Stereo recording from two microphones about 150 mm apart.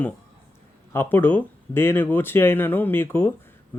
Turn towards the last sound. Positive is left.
turn(degrees=15)  # may be behind; listen again after turning